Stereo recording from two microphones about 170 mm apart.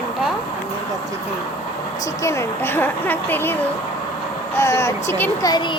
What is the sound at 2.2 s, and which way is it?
A woman's voice, 15° left (ahead or behind).